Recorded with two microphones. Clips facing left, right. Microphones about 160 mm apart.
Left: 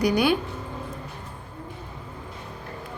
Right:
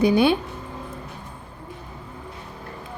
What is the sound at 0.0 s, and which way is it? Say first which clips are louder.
Speech: right 4 dB; 25° right (ahead or behind).